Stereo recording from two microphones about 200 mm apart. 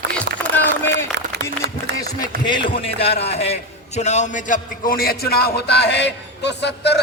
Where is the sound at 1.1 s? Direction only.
60° right (ahead or behind).